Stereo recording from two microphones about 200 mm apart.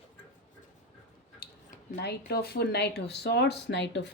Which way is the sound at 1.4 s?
50° left (ahead or behind).